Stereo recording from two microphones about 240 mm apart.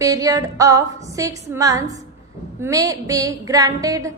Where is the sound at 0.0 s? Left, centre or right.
Centre.